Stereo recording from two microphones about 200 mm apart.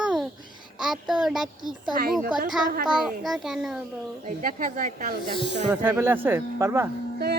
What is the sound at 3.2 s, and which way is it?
Speech, centre (ahead or behind).